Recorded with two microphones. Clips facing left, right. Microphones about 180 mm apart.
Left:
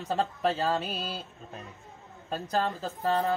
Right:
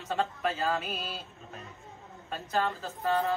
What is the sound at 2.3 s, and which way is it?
Speech, 35° left (ahead or behind).